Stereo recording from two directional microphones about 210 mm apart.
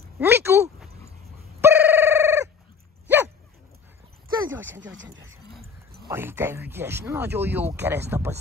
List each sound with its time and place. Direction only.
0.2 s speech: 10° right (ahead or behind)
1.6 s telephone bell ringing: 10° right (ahead or behind)
4.4 s a sound: 10° right (ahead or behind)
4.7 s speech: 60° right (ahead or behind)
6.0 s speech: 10° right (ahead or behind)